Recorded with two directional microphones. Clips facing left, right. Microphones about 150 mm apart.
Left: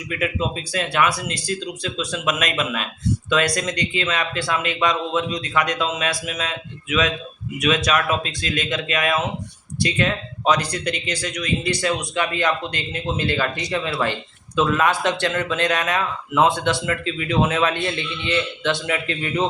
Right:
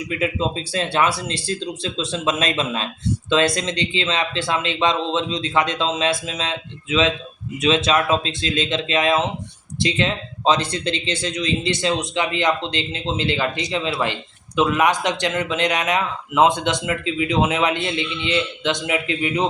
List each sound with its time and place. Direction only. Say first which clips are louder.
0.1 s speech: right 1 dB; 25° right (ahead or behind)